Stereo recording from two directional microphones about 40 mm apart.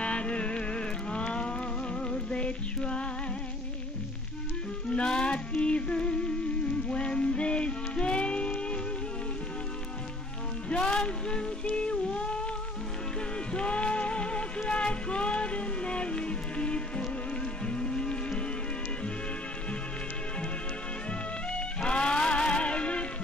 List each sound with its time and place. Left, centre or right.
0.0 s music: left
4.8 s music: left
10.7 s music: left
13.5 s music: left
21.1 s music: left